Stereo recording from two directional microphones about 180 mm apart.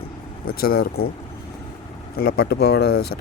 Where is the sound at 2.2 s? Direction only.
60° left (ahead or behind).